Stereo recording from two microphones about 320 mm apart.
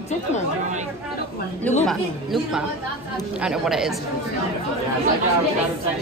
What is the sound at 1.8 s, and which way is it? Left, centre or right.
Speech, centre.